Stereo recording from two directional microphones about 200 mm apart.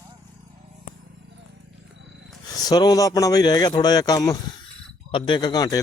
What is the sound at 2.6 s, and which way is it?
Speech, 20° left (ahead or behind).